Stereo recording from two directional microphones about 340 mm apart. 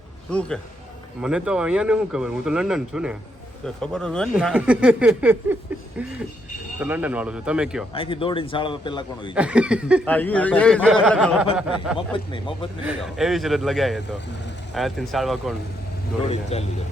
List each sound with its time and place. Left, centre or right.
0.3 s speech: centre
7.9 s a man's voice: centre
9.3 s speech: centre
11.9 s a man's voice: centre
12.8 s speech: centre
16.3 s a man's voice: centre